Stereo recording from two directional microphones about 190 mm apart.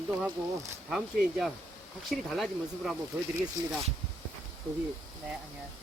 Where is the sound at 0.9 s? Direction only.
Centre (ahead or behind).